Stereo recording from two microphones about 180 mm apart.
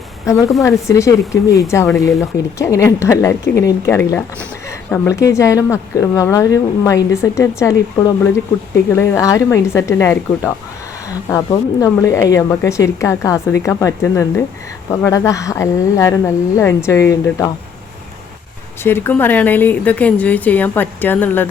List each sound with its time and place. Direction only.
0.6 s speech: 15° left (ahead or behind)
18.8 s speech: 15° left (ahead or behind)